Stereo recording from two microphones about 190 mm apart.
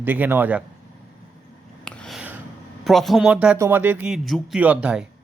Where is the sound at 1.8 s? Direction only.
5° left (ahead or behind).